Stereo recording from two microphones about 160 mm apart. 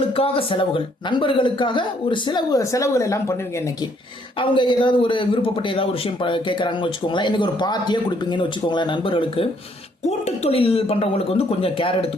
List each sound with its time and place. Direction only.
0.2 s a man's voice: 35° left (ahead or behind); by 3.3 s 20° left (ahead or behind)
4.4 s a man's voice: 30° left (ahead or behind)